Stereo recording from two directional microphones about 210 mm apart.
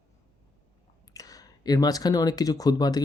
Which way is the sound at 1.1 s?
15° left (ahead or behind).